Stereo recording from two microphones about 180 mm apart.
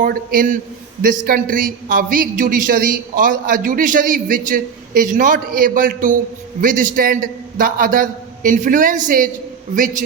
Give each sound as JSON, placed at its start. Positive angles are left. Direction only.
{"t": 0.0, "sound": "a man's voice", "side_deg": -50}